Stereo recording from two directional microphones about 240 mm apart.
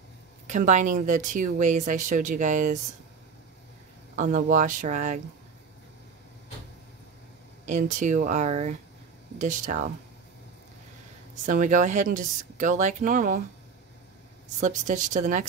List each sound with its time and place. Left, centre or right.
0.5 s speech: right
4.2 s speech: right
7.6 s speech: right
11.4 s speech: right
14.6 s speech: right